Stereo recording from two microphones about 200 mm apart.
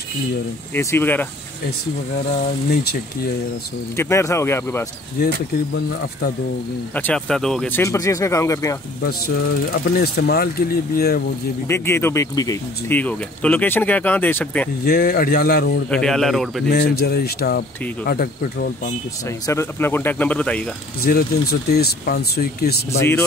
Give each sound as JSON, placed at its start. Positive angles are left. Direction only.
{"t": 0.7, "sound": "speech", "side_deg": 10}
{"t": 3.9, "sound": "speech", "side_deg": 15}
{"t": 7.0, "sound": "speech", "side_deg": 5}
{"t": 9.0, "sound": "speech", "side_deg": 50}
{"t": 11.6, "sound": "speech", "side_deg": 10}
{"t": 14.9, "sound": "speech", "side_deg": 50}
{"t": 15.9, "sound": "speech", "side_deg": 5}
{"t": 16.7, "sound": "speech", "side_deg": 50}
{"t": 19.4, "sound": "speech", "side_deg": 15}
{"t": 21.0, "sound": "speech", "side_deg": 50}